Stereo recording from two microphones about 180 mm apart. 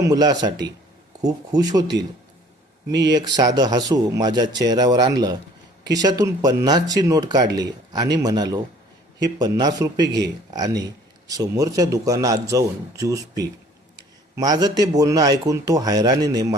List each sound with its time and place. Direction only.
0.0 s speech: 20° right (ahead or behind)
3.1 s speech: 25° right (ahead or behind)